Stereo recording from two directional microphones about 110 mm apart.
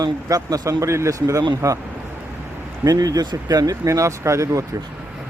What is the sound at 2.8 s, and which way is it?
Speech, 35° right (ahead or behind).